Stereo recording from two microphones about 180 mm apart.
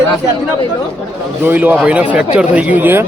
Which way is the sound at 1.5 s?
10° right (ahead or behind).